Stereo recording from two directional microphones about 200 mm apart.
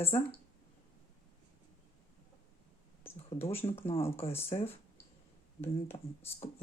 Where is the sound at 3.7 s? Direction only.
30° left (ahead or behind).